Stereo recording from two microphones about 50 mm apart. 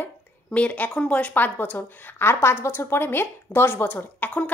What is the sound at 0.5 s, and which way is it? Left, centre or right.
A woman's voice, left.